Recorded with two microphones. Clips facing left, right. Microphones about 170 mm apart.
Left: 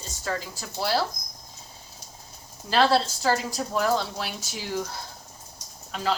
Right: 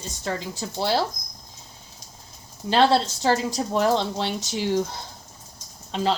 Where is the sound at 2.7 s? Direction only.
25° right (ahead or behind).